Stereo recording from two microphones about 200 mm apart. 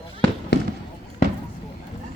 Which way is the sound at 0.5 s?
60° left (ahead or behind).